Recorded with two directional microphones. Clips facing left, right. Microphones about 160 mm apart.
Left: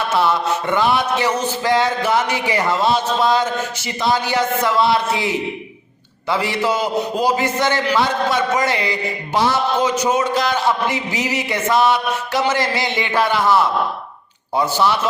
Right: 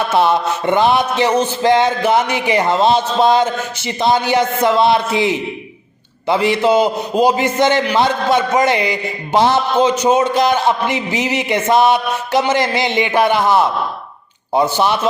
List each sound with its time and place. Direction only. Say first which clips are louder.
0.2 s a man's voice: right 3 dB; 20° right (ahead or behind)